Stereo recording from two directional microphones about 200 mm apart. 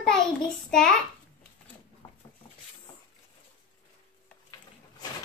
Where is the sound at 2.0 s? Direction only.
10° left (ahead or behind).